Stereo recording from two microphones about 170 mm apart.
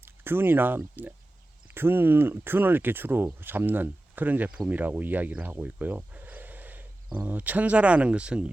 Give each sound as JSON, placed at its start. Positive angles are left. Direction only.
{"t": 0.0, "sound": "speech", "side_deg": -15}